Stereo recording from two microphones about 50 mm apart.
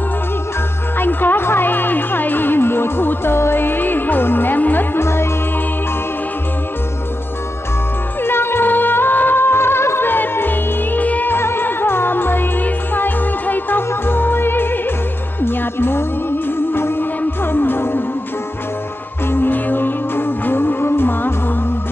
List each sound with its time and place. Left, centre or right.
0.9 s music: left
4.9 s music: left
8.2 s music: left
11.3 s music: left
19.3 s music: left